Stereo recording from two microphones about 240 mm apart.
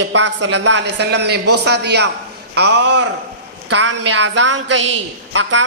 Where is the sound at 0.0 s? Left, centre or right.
Right.